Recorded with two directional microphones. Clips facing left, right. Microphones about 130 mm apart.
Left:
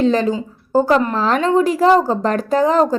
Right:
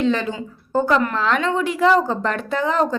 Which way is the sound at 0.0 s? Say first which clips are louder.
Left 5 dB; 40° left (ahead or behind).